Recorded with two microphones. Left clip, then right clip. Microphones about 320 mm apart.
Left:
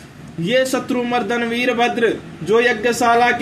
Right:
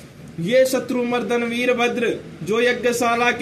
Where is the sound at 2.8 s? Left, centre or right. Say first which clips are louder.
Left 4 dB; centre.